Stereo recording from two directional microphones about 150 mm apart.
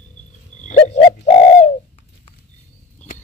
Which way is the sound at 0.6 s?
50° left (ahead or behind).